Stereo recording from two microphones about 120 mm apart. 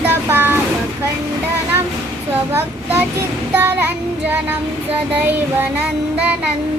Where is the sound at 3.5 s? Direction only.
15° right (ahead or behind).